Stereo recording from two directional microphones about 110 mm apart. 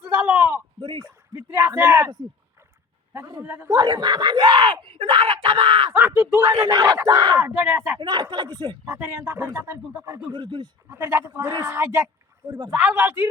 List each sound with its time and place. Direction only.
0.0 s a sound: 15° right (ahead or behind)
0.8 s a sound: 40° right (ahead or behind)
1.4 s a sound: 20° right (ahead or behind)
3.4 s speech: 10° right (ahead or behind)
3.7 s speech: 40° right (ahead or behind)
5.9 s speech: 15° right (ahead or behind)
6.4 s speech: 40° right (ahead or behind)
7.3 s speech: 15° right (ahead or behind)
7.9 s speech: 40° right (ahead or behind)
8.8 s speech: 15° right (ahead or behind)
10.3 s speech: 40° right (ahead or behind)
10.8 s speech: 20° right (ahead or behind)
12.5 s speech: 40° right (ahead or behind)
12.7 s speech: 15° right (ahead or behind)